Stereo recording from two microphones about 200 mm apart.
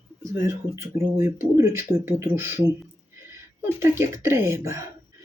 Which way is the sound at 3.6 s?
10° right (ahead or behind).